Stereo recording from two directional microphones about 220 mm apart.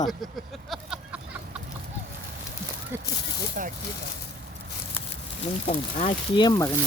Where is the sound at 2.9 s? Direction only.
10° right (ahead or behind).